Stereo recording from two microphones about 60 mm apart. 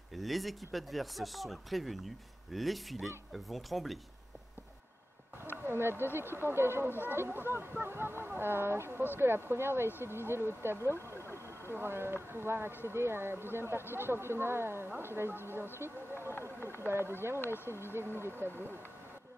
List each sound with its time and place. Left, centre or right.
0.1 s speech: centre
5.6 s speech: right
11.1 s vehicle: left
11.7 s speech: right